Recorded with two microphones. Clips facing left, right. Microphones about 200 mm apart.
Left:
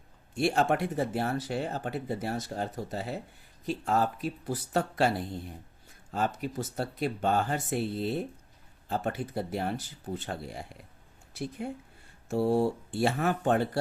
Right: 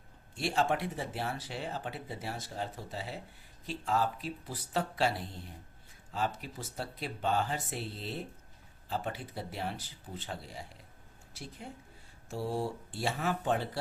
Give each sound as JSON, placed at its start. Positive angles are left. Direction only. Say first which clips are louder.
{"t": 0.3, "sound": "speech", "louder": "left 5 dB", "side_deg": 55}
{"t": 12.3, "sound": "speech", "louder": "left 9 dB", "side_deg": 60}